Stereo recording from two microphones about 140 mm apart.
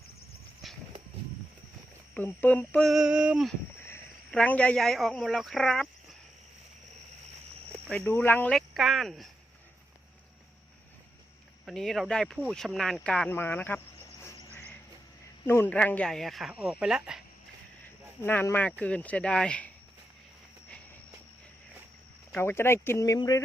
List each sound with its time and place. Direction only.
0.6 s walk: centre (ahead or behind)
2.1 s speech: 10° left (ahead or behind)
2.9 s speech: 5° right (ahead or behind)
3.8 s speech: 10° left (ahead or behind)
7.9 s speech: 15° left (ahead or behind)
8.5 s speech: centre (ahead or behind)
11.6 s speech: centre (ahead or behind)
13.4 s cricket: 15° left (ahead or behind)
15.4 s speech: 15° left (ahead or behind); by 17.2 s 5° right (ahead or behind)
18.2 s speech: 15° left (ahead or behind)
22.4 s speech: 15° left (ahead or behind)